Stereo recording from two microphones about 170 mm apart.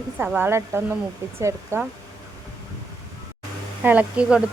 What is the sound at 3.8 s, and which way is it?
Speech, 10° right (ahead or behind).